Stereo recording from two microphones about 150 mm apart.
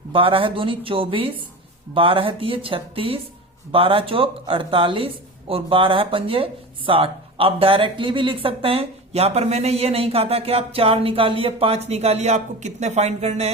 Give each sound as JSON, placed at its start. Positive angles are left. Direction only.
{"t": 0.1, "sound": "speech", "side_deg": -35}